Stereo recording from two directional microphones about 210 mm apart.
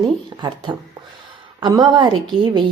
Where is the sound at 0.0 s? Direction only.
20° right (ahead or behind).